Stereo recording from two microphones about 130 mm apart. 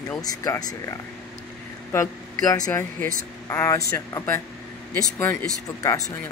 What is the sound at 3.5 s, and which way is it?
Speech, 25° left (ahead or behind).